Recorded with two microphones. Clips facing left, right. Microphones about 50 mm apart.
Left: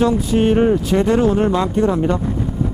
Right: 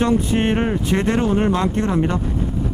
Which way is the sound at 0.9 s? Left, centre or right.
Right.